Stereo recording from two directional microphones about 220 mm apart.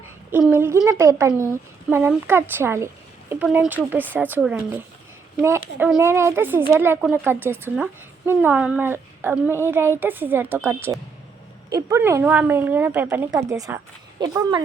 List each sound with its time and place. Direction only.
0.3 s speech: 10° right (ahead or behind)